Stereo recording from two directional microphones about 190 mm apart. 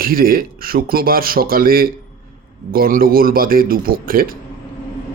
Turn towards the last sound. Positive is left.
turn(degrees=-50)  # may be behind; listen again after turning